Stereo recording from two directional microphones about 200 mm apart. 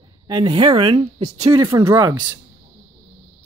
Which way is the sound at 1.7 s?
15° right (ahead or behind).